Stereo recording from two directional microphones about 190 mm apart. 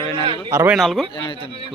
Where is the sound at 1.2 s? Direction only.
25° left (ahead or behind).